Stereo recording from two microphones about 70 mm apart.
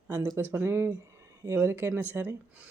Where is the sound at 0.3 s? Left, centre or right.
Right.